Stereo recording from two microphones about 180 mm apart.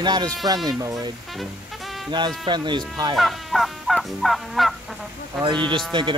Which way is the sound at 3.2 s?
Centre (ahead or behind).